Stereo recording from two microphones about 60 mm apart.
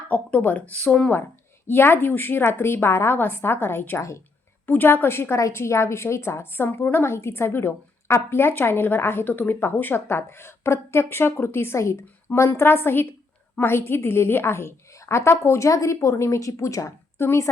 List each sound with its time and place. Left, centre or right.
0.1 s speech: left
1.6 s a woman's voice: left
5.4 s a woman's voice: left
17.2 s a woman's voice: left